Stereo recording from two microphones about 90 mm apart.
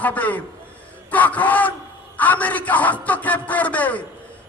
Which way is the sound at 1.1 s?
15° left (ahead or behind).